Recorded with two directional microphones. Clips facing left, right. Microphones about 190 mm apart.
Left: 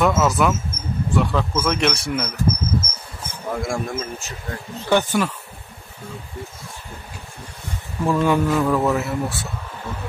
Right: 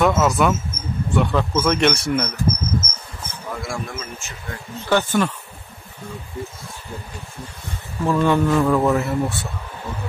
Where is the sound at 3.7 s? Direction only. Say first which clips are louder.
Left 4 dB; 45° left (ahead or behind).